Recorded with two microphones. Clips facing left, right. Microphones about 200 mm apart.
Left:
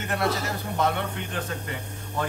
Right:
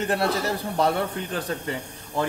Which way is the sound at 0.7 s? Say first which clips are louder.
Right 2 dB; 35° right (ahead or behind).